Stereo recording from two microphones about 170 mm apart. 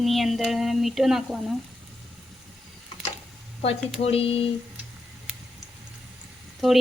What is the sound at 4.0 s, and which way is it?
Speech, 35° left (ahead or behind).